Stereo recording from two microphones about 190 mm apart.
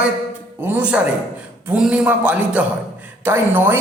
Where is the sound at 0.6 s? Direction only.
10° right (ahead or behind).